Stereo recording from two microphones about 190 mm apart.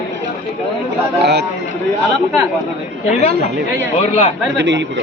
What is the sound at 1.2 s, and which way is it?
Speech, 60° right (ahead or behind).